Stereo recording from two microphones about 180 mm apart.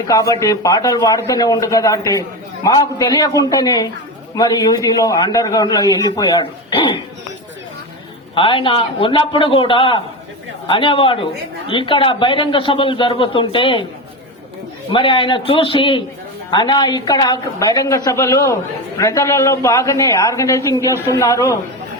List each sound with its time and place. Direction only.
0.1 s speech: 20° left (ahead or behind)
8.4 s speech: 30° left (ahead or behind)
14.9 s a man's voice: 30° left (ahead or behind)